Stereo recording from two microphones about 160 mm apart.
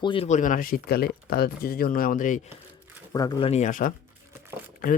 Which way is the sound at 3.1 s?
25° left (ahead or behind).